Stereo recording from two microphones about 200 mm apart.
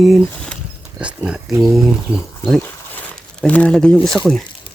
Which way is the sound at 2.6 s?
5° left (ahead or behind).